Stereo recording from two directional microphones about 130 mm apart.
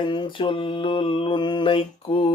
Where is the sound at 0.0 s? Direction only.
35° left (ahead or behind).